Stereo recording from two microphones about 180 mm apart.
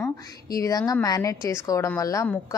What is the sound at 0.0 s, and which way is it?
A woman's voice, 20° left (ahead or behind).